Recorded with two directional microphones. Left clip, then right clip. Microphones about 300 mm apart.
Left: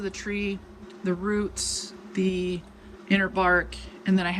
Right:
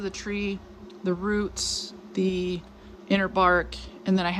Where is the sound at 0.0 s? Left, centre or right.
Centre.